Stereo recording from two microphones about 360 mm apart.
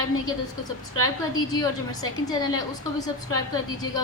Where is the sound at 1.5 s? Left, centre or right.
Centre.